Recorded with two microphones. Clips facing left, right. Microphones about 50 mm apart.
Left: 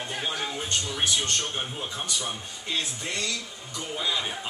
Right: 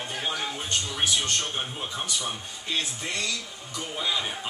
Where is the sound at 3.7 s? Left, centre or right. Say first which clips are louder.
Even; centre.